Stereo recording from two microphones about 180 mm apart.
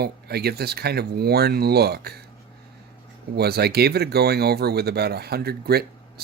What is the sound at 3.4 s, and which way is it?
Speech, 60° right (ahead or behind).